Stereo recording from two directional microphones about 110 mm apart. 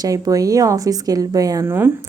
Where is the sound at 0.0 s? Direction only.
30° right (ahead or behind).